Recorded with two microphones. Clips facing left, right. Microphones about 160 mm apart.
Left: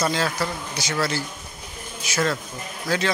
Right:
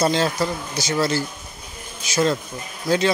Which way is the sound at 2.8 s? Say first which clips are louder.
Right 5 dB; 20° right (ahead or behind).